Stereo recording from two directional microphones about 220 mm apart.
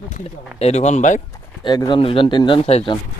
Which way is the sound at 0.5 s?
30° left (ahead or behind).